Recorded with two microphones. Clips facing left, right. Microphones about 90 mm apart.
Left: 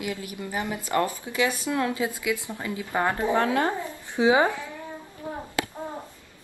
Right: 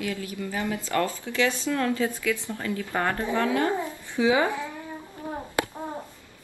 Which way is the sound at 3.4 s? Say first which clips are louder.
Right 2 dB; 35° left (ahead or behind).